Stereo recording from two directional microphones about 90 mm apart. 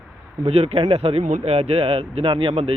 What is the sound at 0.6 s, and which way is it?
Speech, 85° right.